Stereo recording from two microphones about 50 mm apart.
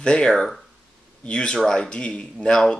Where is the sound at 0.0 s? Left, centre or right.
Centre.